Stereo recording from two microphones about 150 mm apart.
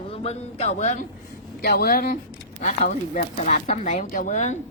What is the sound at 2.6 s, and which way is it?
Speech, 50° left (ahead or behind).